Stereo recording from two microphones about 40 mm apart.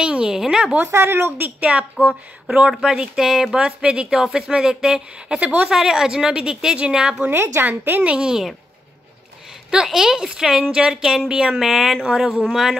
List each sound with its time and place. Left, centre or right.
0.0 s a sound: right
0.3 s a sound: centre
0.9 s a woman's voice: right
1.6 s speech: right
2.8 s a woman's voice: centre
5.4 s speech: right
5.7 s a woman's voice: centre
7.2 s speech: right
7.6 s a woman's voice: right
8.2 s a woman's voice: centre
9.8 s a woman's voice: centre
10.6 s speech: right
10.9 s a woman's voice: centre
11.6 s a woman's voice: centre